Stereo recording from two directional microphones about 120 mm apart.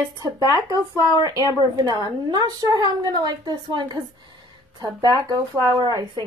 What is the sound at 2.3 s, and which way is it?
A woman's voice, 35° right (ahead or behind).